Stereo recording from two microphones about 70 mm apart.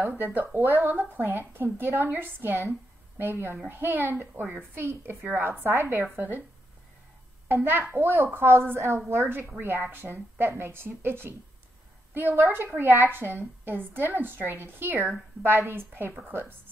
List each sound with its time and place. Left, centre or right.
0.2 s a woman's voice: right
7.4 s a child's voice: right